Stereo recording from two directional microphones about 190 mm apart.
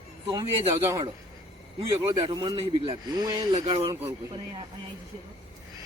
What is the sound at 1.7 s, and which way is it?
A man's voice, 20° right (ahead or behind).